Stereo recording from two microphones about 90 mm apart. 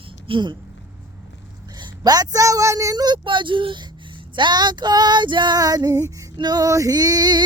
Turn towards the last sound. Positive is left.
turn(degrees=-50)  # may be behind; listen again after turning